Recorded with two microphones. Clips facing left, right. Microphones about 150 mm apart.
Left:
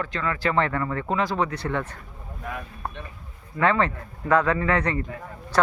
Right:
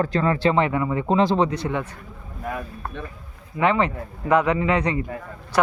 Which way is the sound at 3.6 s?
15° right (ahead or behind).